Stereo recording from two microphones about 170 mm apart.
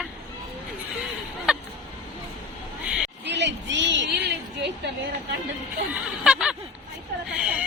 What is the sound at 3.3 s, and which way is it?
A woman's voice, 90° right.